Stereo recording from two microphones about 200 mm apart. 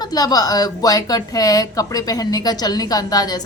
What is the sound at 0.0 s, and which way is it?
A woman's voice, 20° left (ahead or behind).